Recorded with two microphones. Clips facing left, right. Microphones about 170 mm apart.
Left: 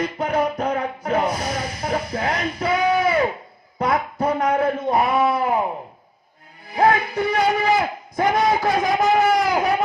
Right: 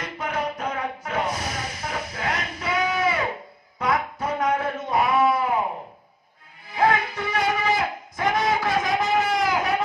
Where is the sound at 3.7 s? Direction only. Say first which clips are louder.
Left 3 dB; 35° left (ahead or behind).